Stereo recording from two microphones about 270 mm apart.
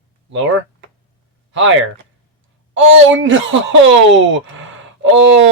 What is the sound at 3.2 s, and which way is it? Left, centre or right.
Speech, right.